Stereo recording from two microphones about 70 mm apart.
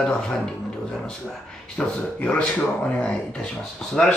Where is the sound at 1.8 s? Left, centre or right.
Centre.